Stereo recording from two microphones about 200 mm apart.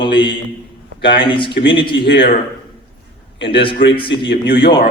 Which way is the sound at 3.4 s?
25° left (ahead or behind).